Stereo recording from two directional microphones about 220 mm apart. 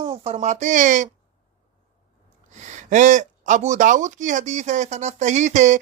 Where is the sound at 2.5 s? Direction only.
35° right (ahead or behind).